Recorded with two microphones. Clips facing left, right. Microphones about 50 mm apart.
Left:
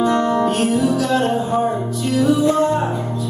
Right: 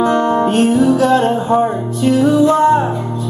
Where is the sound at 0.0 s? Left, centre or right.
Right.